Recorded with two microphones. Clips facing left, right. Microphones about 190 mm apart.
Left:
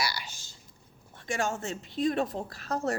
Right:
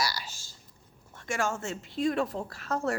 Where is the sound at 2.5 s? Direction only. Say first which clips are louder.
Right 1 dB; 40° left (ahead or behind).